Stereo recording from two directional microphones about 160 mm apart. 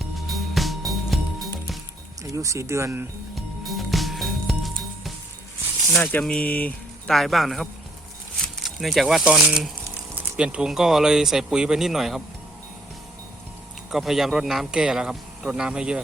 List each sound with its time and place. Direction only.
0.3 s music: centre (ahead or behind)
2.2 s speech: 20° right (ahead or behind)
3.3 s music: centre (ahead or behind)
5.9 s speech: 10° left (ahead or behind)
13.9 s speech: centre (ahead or behind)